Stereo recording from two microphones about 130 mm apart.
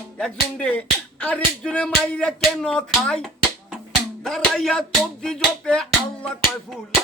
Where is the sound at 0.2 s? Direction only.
5° left (ahead or behind).